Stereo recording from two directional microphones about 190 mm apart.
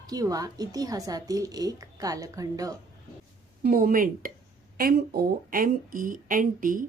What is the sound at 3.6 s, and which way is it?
Speech, 50° right (ahead or behind).